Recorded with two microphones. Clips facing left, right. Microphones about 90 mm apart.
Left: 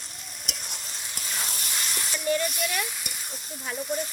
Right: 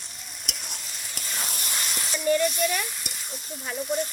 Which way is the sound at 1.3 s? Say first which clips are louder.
Right 1 dB; 5° right (ahead or behind).